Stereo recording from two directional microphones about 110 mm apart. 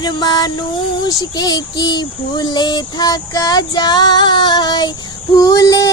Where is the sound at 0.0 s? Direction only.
45° left (ahead or behind).